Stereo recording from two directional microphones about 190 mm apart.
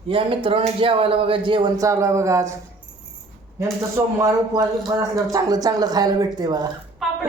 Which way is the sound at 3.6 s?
15° right (ahead or behind).